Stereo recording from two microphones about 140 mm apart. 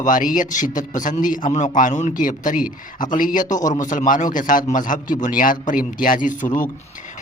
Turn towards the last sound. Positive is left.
turn(degrees=70)  # may be behind; listen again after turning